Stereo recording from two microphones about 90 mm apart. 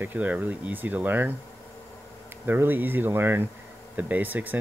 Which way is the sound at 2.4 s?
25° right (ahead or behind).